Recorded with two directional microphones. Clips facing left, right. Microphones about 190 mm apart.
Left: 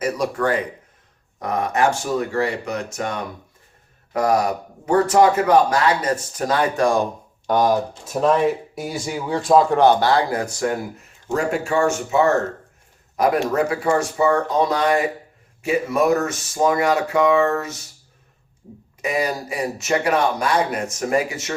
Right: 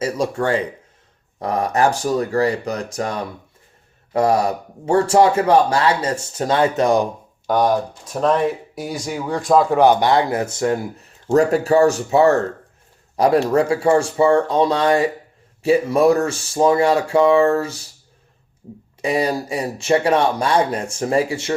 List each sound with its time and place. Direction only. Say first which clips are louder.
0.0 s speech: right 1 dB; 25° right (ahead or behind)
7.4 s speech: right 1 dB; centre (ahead or behind)
10.0 s speech: right 2 dB; 20° right (ahead or behind)
11.3 s speech: right 7 dB; 40° right (ahead or behind)
19.0 s speech: right 3 dB; 30° right (ahead or behind)